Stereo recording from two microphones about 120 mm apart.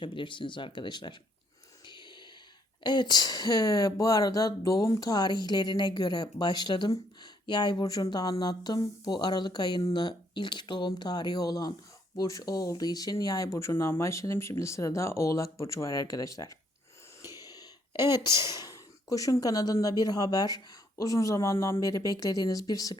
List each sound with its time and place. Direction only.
0.0 s speech: 45° left (ahead or behind)
2.8 s speech: 35° left (ahead or behind)
17.4 s a sound: 30° left (ahead or behind)
18.3 s speech: 25° right (ahead or behind)
18.5 s speech: 30° left (ahead or behind)